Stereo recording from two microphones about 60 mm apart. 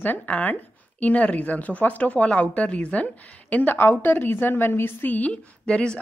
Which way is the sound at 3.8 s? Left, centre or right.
Left.